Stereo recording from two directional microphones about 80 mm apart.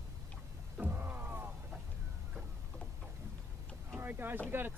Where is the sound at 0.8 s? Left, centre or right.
Right.